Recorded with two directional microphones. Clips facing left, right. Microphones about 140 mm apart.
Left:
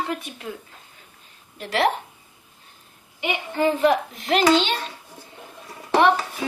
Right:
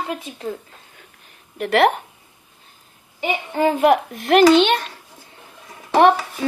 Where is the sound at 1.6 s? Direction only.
60° right (ahead or behind).